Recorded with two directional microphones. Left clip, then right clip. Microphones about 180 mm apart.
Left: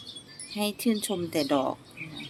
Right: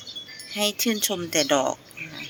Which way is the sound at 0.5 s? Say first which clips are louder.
Right 5 dB; 10° left (ahead or behind).